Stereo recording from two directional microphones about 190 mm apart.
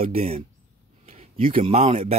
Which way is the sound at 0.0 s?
30° right (ahead or behind).